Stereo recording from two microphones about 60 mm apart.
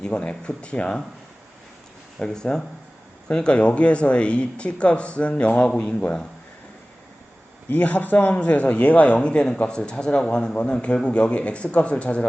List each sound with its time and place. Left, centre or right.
0.0 s speech: centre
2.1 s a man's voice: centre
7.7 s a man's voice: left